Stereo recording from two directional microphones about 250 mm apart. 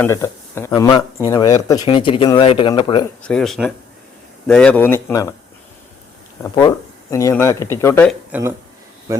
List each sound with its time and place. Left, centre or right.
0.0 s speech: centre
3.2 s speech: centre
6.4 s speech: centre
8.3 s speech: centre